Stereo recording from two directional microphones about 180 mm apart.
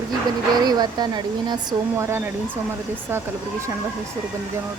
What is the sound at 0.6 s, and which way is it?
Speech, 25° right (ahead or behind).